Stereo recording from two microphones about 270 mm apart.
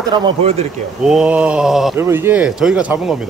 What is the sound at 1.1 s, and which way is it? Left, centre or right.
Speech, centre.